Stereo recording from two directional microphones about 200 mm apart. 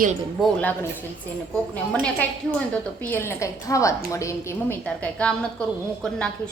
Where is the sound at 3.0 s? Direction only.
10° left (ahead or behind).